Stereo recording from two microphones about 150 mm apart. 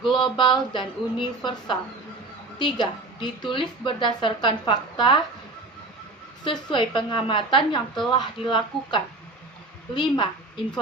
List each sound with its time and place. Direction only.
0.1 s a woman's voice: 30° left (ahead or behind)
6.4 s a woman's voice: 30° left (ahead or behind)